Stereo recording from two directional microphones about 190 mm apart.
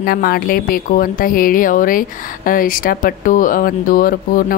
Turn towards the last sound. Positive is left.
turn(degrees=45)  # may be behind; listen again after turning